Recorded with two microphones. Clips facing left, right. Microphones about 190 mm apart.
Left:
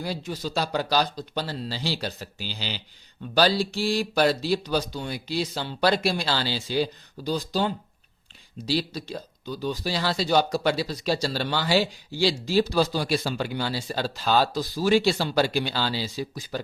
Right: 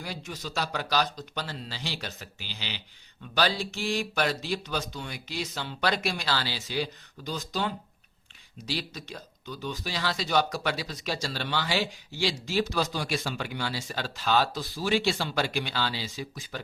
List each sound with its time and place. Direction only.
0.0 s speech: 30° left (ahead or behind)